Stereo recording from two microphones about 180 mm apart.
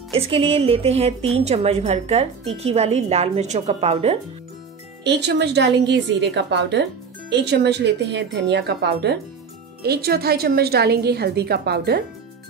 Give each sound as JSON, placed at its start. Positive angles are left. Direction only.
{"t": 0.1, "sound": "speech", "side_deg": -30}
{"t": 5.0, "sound": "a woman's voice", "side_deg": -70}